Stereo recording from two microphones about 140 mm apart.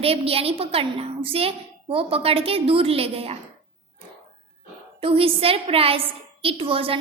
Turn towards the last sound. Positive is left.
turn(degrees=-40)  # may be behind; listen again after turning